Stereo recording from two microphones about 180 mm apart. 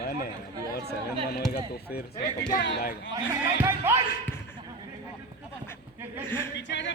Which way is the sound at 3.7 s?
15° right (ahead or behind).